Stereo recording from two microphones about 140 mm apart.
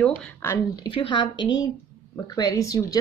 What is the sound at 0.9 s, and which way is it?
A woman's voice, 35° left (ahead or behind).